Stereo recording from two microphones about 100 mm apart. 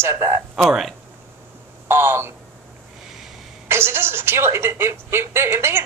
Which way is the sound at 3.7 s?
25° right (ahead or behind).